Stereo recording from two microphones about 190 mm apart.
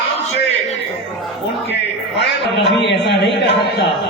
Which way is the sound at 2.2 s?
70° left (ahead or behind).